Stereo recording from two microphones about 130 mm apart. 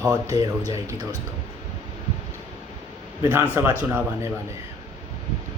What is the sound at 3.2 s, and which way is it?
Speech, 25° right (ahead or behind).